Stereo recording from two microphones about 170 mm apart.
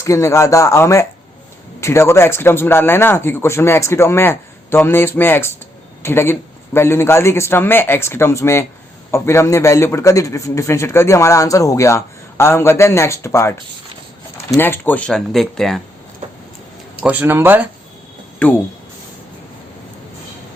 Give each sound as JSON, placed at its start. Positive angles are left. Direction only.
{"t": 0.0, "sound": "a man's voice", "side_deg": 20}
{"t": 16.2, "sound": "a sound", "side_deg": -45}
{"t": 17.0, "sound": "speech", "side_deg": -10}
{"t": 18.4, "sound": "a man's voice", "side_deg": 10}